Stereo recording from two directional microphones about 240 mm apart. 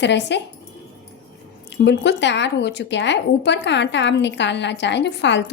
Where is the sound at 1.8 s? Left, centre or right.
Left.